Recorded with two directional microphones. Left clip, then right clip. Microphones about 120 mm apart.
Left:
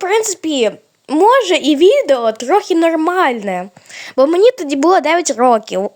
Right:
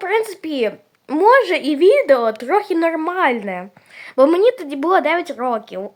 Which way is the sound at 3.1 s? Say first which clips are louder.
Left 4 dB; 55° left (ahead or behind).